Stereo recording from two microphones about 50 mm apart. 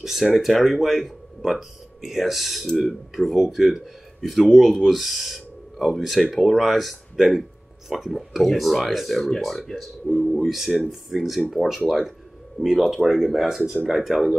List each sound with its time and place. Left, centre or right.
0.0 s speech: centre
12.6 s speech: right
12.9 s speech: centre